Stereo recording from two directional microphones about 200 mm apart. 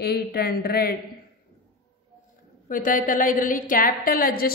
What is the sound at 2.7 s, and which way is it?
A woman's voice, 40° left (ahead or behind).